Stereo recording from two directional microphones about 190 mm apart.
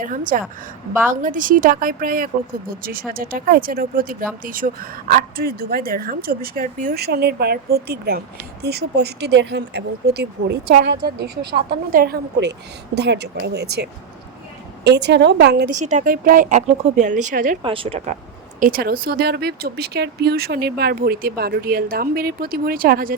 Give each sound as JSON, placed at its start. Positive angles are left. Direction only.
{"t": 0.0, "sound": "speech", "side_deg": -45}
{"t": 14.8, "sound": "speech", "side_deg": -60}
{"t": 15.7, "sound": "speech", "side_deg": -40}
{"t": 17.6, "sound": "speech", "side_deg": -30}
{"t": 18.6, "sound": "speech", "side_deg": -50}